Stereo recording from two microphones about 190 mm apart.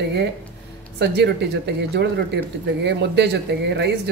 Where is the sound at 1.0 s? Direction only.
60° right (ahead or behind).